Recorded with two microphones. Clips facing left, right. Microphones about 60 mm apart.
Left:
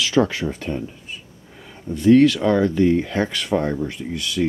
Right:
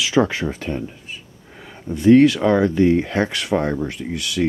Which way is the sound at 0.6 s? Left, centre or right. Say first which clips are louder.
Right 1 dB; centre.